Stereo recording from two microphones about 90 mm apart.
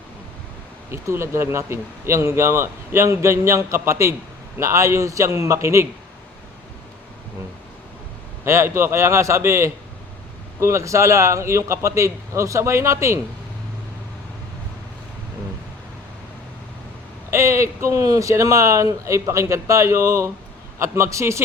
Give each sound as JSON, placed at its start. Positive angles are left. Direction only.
{"t": 0.9, "sound": "speech", "side_deg": -30}
{"t": 8.4, "sound": "speech", "side_deg": -30}
{"t": 17.3, "sound": "speech", "side_deg": -30}